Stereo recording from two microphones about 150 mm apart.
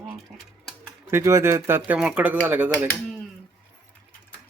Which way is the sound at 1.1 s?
20° right (ahead or behind).